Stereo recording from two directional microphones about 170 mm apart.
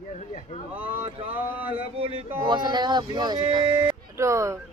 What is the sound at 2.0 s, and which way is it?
Speech, 30° right (ahead or behind).